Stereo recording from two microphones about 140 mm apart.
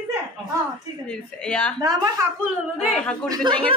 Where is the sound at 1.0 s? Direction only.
10° left (ahead or behind).